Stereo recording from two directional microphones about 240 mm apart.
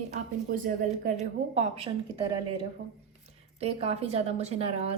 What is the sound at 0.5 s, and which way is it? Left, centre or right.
A woman's voice, right.